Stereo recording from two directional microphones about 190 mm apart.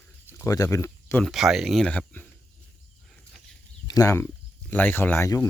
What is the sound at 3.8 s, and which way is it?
Speech, 20° left (ahead or behind).